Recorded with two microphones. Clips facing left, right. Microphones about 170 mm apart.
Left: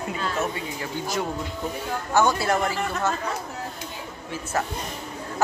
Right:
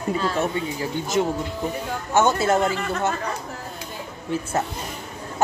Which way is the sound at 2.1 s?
20° right (ahead or behind).